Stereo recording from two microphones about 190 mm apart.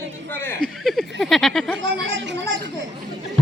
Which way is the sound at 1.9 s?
70° right (ahead or behind).